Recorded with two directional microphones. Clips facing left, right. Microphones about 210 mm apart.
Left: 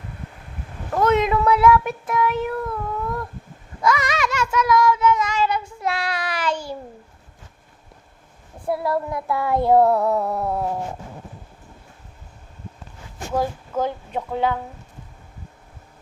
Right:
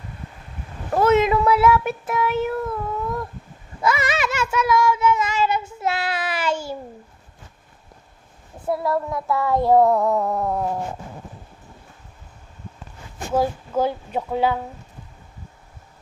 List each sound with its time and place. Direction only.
1.0 s child singing: 5° right (ahead or behind)
3.0 s humming: centre (ahead or behind)
3.8 s child singing: 5° right (ahead or behind)
8.6 s child singing: centre (ahead or behind)
13.3 s child singing: 5° right (ahead or behind)